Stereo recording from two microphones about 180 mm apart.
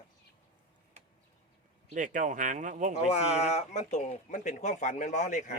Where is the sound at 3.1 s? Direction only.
35° left (ahead or behind).